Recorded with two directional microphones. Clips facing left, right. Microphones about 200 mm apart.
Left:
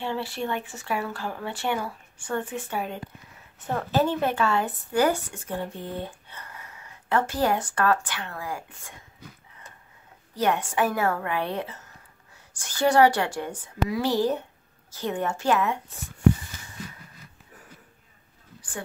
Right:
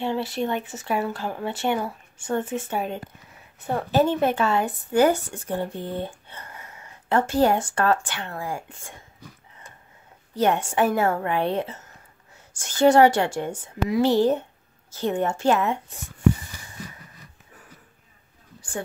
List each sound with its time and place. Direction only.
0.0 s speech: 20° right (ahead or behind)
10.3 s speech: 25° right (ahead or behind)